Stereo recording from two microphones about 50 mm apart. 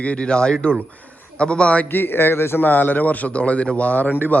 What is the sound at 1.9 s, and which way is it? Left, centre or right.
Speech, left.